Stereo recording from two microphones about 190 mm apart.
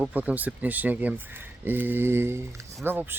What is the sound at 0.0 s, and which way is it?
Speech, 10° right (ahead or behind).